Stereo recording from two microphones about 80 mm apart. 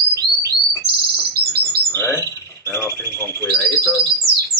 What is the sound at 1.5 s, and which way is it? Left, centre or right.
Bird, left.